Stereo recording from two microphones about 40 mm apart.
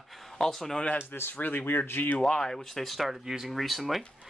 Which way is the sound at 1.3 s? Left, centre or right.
Left.